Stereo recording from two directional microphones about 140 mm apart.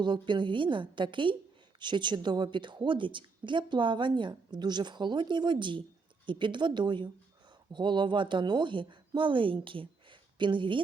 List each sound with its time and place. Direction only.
0.0 s a woman's voice: 35° right (ahead or behind)